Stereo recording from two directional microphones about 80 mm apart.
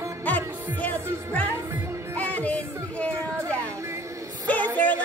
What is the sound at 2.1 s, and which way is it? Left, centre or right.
Music, centre.